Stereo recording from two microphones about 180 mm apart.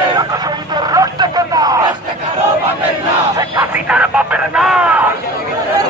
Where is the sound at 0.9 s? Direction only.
20° right (ahead or behind).